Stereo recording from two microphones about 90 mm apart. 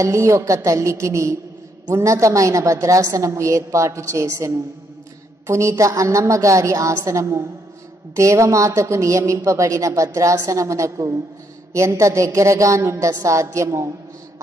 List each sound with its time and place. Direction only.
0.0 s speech: 30° right (ahead or behind)